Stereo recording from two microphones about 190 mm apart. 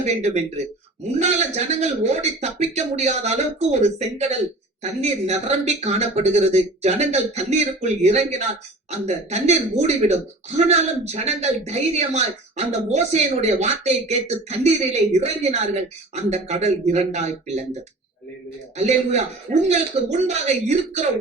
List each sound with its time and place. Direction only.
0.0 s a man's voice: 35° right (ahead or behind)
19.6 s a man's voice: 35° right (ahead or behind)